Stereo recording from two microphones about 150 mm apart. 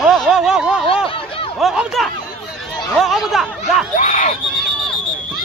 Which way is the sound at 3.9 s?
55° left (ahead or behind).